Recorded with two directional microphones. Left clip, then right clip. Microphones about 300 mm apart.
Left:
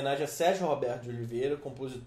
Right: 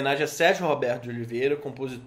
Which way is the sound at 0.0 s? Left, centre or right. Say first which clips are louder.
Right 6 dB; right.